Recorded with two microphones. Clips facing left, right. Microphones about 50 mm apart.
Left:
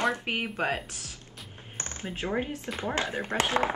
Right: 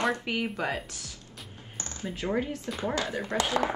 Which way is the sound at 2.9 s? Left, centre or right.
Left.